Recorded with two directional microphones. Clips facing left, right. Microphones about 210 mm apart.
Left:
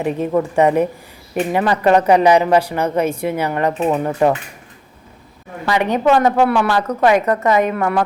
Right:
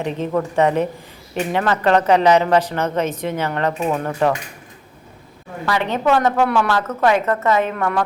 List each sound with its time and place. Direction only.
0.0 s speech: 10° left (ahead or behind)
5.6 s speech: 15° left (ahead or behind)